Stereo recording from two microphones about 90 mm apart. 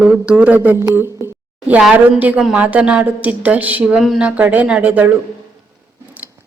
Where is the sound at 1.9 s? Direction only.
15° right (ahead or behind).